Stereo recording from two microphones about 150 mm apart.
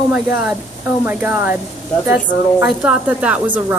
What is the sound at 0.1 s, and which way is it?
Speech, 10° right (ahead or behind).